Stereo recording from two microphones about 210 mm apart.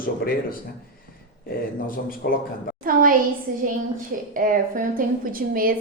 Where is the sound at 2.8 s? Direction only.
40° right (ahead or behind).